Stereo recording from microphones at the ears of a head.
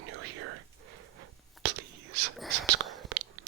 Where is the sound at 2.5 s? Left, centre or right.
Right.